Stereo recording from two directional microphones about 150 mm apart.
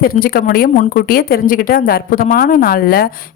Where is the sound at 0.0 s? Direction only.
80° left.